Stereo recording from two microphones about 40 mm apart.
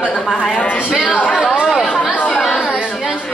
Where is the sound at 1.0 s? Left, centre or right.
Left.